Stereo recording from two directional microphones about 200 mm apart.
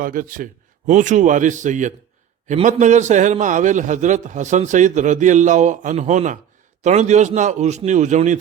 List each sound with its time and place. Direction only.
0.0 s a man's voice: 45° right (ahead or behind)